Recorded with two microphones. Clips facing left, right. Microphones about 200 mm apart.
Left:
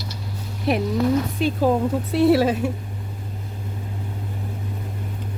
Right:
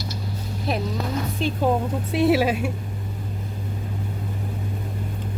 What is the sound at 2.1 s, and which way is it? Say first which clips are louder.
Speech: left 2 dB; centre (ahead or behind).